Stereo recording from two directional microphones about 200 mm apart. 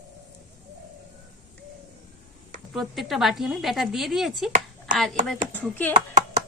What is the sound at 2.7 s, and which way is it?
Speech, centre (ahead or behind).